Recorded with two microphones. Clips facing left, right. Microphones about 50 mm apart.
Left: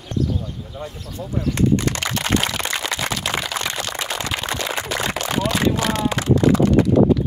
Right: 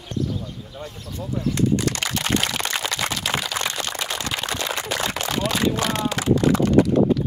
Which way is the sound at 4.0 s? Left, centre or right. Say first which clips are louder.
Left 2 dB; left.